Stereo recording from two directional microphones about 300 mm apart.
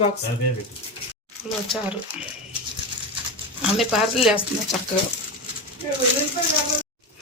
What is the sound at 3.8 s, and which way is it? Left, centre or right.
Speech, centre.